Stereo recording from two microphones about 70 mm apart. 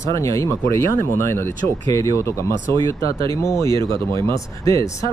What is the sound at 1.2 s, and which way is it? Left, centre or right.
Speech, left.